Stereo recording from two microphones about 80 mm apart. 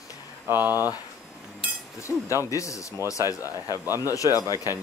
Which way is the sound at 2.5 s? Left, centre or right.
Left.